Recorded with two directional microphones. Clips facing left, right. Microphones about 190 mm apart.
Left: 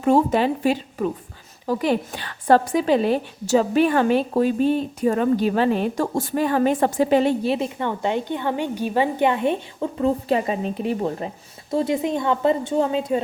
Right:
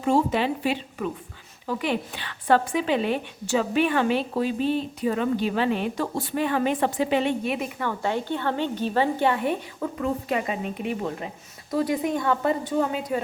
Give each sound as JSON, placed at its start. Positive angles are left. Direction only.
{"t": 0.0, "sound": "a woman's voice", "side_deg": 50}